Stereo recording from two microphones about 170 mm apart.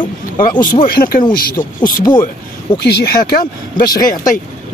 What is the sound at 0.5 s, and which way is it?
Speech, 25° left (ahead or behind).